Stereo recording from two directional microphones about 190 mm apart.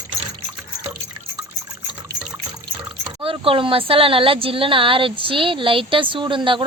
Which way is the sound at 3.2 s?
30° right (ahead or behind).